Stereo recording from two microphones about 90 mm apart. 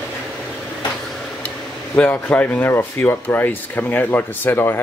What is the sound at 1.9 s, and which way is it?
Speech, 15° left (ahead or behind).